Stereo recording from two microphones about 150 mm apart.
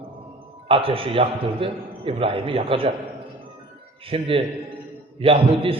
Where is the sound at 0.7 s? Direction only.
40° right (ahead or behind).